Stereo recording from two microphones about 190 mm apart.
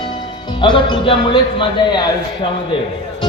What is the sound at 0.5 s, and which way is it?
Speech, 25° left (ahead or behind).